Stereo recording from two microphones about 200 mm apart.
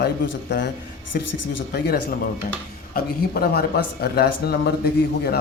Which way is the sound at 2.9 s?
45° left (ahead or behind).